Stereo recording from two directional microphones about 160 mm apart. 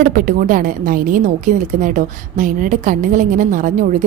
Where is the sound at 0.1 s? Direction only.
55° right (ahead or behind).